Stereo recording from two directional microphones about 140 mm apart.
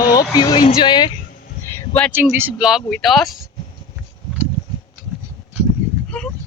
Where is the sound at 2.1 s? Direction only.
15° right (ahead or behind).